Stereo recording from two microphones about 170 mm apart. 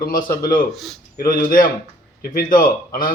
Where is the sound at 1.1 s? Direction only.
60° left (ahead or behind).